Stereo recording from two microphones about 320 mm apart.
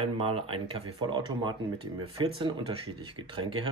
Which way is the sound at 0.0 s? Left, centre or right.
Centre.